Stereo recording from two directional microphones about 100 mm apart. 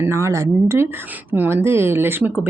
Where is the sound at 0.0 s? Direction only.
30° right (ahead or behind).